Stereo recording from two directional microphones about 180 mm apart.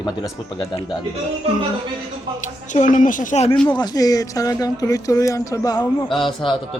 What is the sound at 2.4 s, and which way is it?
Speech, 45° left (ahead or behind).